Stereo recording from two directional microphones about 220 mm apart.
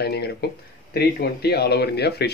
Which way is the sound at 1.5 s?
45° left (ahead or behind).